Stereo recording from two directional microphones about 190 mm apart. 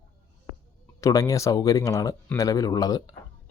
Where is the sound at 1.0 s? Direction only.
20° left (ahead or behind).